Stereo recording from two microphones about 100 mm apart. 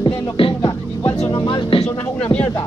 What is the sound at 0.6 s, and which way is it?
Music, 40° left (ahead or behind).